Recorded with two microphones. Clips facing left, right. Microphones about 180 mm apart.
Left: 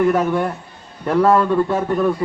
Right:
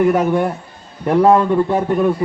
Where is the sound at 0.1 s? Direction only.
15° right (ahead or behind).